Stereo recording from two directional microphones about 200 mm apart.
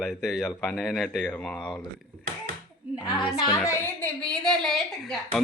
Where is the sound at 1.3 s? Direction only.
15° left (ahead or behind).